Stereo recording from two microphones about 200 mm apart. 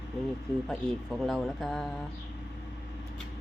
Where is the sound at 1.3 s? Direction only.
Centre (ahead or behind).